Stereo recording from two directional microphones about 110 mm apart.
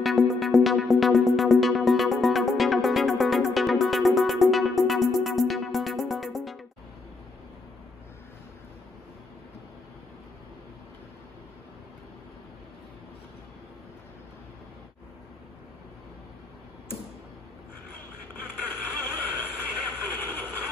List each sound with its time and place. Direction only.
0.0 s music: centre (ahead or behind)
18.3 s vehicle: 20° left (ahead or behind)